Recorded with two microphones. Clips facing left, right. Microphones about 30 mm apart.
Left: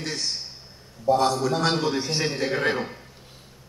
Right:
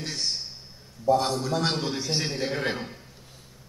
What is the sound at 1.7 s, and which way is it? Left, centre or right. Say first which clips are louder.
A man's voice: left 4 dB; centre.